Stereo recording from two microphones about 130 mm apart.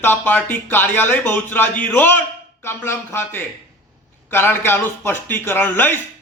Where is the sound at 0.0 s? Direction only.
15° left (ahead or behind).